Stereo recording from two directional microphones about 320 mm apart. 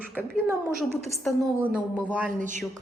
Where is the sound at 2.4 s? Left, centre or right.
Right.